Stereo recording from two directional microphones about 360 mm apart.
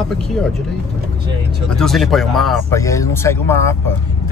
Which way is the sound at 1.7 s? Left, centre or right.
Centre.